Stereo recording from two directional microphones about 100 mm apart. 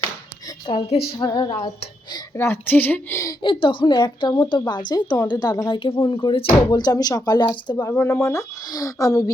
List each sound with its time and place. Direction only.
0.6 s a woman's voice: 70° left (ahead or behind)
1.2 s a woman's voice: 45° left (ahead or behind)
2.3 s a woman's voice: 25° left (ahead or behind)
3.4 s a woman's voice: 60° left (ahead or behind)
6.5 s a woman's voice: 40° left (ahead or behind)
7.9 s speech: 30° left (ahead or behind)